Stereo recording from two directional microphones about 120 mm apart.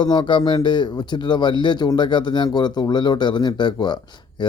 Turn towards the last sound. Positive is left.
turn(degrees=40)  # may be behind; listen again after turning